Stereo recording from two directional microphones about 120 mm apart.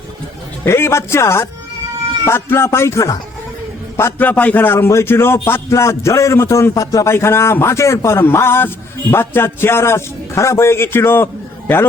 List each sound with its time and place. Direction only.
0.6 s a man's voice: 20° left (ahead or behind)